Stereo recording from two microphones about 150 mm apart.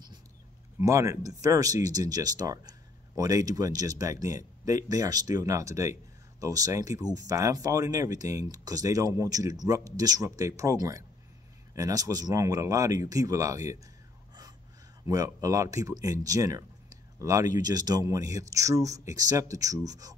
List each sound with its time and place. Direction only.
0.7 s speech: 20° right (ahead or behind)
15.0 s speech: 20° right (ahead or behind)
16.3 s a sound: 20° right (ahead or behind)
17.6 s speech: 25° right (ahead or behind)